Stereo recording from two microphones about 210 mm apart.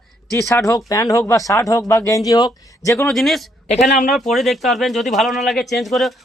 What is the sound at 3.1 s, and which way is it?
Speech, centre (ahead or behind).